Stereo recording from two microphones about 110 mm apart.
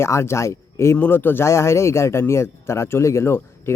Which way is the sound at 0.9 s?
15° left (ahead or behind).